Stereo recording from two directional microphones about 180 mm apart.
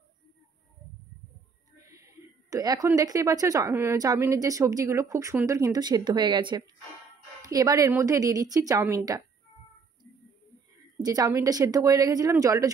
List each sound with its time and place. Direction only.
1.9 s a sound: 15° right (ahead or behind)
3.0 s a woman's voice: 20° right (ahead or behind)
11.0 s a woman's voice: 20° right (ahead or behind)